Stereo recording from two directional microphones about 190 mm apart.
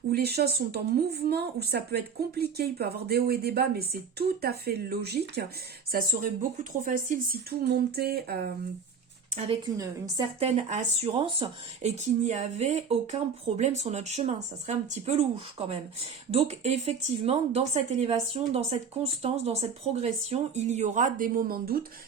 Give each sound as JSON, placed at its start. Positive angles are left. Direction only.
{"t": 0.1, "sound": "speech", "side_deg": -55}
{"t": 5.9, "sound": "speech", "side_deg": -45}
{"t": 9.7, "sound": "a woman's voice", "side_deg": -15}
{"t": 10.4, "sound": "speech", "side_deg": -35}
{"t": 20.0, "sound": "speech", "side_deg": -35}